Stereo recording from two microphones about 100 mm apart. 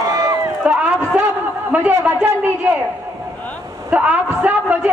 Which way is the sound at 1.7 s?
20° right (ahead or behind).